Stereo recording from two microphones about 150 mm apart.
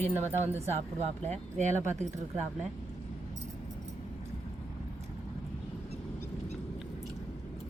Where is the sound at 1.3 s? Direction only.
50° right (ahead or behind).